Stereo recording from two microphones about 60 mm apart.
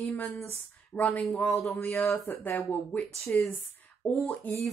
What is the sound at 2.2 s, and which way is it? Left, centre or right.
A woman's voice, left.